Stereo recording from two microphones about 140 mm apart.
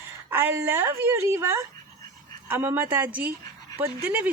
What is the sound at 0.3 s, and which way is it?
Speech, 15° right (ahead or behind).